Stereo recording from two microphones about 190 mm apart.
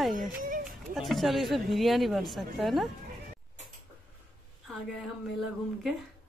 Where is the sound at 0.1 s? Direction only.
45° right (ahead or behind).